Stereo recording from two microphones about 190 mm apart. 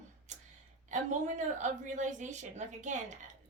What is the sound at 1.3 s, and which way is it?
A woman's voice, 40° right (ahead or behind).